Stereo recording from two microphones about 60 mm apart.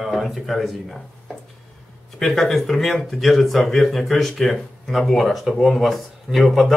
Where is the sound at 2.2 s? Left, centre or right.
Centre.